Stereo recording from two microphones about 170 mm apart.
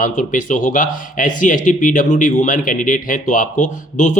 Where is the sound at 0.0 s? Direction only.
50° left (ahead or behind).